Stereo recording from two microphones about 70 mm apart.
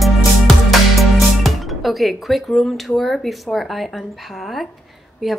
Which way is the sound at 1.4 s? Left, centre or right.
Centre.